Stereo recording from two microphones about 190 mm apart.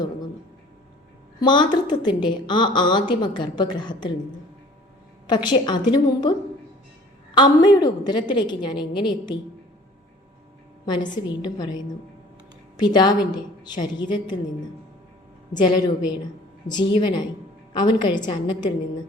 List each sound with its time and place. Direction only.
1.4 s a woman's voice: 25° left (ahead or behind)
5.3 s a woman's voice: 25° left (ahead or behind)
7.3 s a woman's voice: 20° left (ahead or behind)
10.8 s a woman's voice: 25° left (ahead or behind)
15.5 s a woman's voice: 20° left (ahead or behind)